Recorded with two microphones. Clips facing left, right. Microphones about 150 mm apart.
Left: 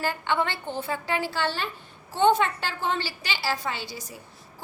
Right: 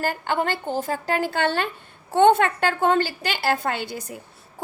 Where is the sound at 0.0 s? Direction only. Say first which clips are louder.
Right 2 dB; 45° right (ahead or behind).